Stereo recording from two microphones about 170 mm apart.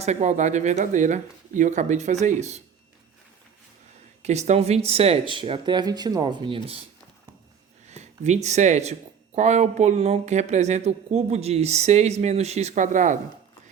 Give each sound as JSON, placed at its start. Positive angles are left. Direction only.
{"t": 0.0, "sound": "speech", "side_deg": -40}
{"t": 4.2, "sound": "speech", "side_deg": -40}
{"t": 7.9, "sound": "speech", "side_deg": -40}